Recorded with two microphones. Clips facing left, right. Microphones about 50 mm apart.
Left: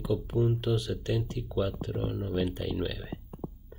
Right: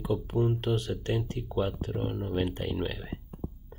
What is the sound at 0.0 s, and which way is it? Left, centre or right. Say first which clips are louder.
Speech: even; right.